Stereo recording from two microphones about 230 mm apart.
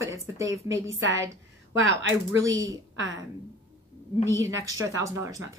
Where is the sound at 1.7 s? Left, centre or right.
Right.